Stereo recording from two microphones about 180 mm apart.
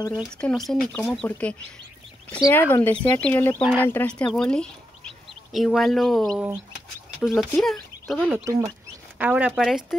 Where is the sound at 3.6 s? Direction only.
5° right (ahead or behind).